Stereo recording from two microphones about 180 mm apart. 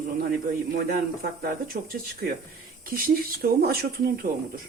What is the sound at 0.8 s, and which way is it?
Speech, 60° right (ahead or behind).